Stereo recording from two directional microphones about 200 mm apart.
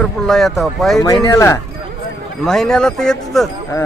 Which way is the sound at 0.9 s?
15° left (ahead or behind).